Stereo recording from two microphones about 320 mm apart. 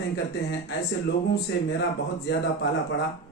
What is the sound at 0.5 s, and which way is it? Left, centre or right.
Speech, left.